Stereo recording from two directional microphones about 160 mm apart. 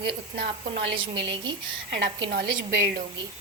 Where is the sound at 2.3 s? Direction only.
70° right (ahead or behind).